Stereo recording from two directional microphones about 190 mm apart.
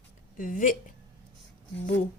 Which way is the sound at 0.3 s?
45° left (ahead or behind).